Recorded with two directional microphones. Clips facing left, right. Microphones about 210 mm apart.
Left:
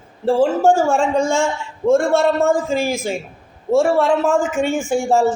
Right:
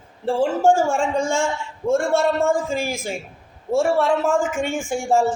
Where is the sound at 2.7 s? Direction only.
10° right (ahead or behind).